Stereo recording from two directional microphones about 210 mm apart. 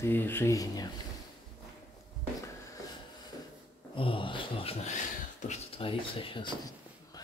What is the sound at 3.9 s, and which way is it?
Speech, 25° left (ahead or behind).